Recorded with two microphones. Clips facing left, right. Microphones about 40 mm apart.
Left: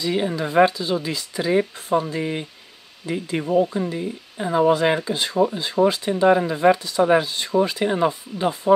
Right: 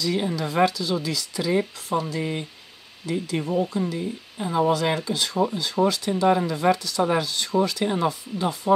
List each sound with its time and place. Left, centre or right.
0.4 s speech: left
7.8 s speech: centre